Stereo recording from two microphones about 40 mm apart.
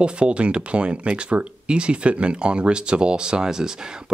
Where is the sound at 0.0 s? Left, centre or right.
Right.